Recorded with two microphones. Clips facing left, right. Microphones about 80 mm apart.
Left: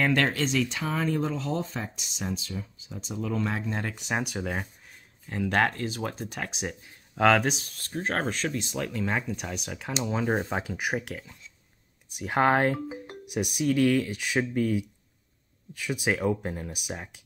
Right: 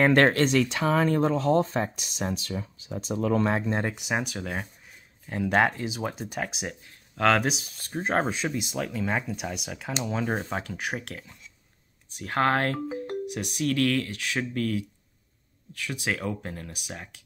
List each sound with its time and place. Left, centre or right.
0.0 s speech: right
3.8 s speech: centre
4.2 s speech: centre
5.2 s speech: centre